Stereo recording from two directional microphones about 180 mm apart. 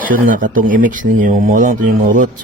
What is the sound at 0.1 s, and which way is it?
Speech, 50° right (ahead or behind).